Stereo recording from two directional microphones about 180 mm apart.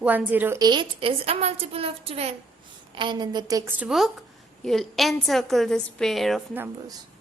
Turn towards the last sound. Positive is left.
turn(degrees=-20)  # may be behind; listen again after turning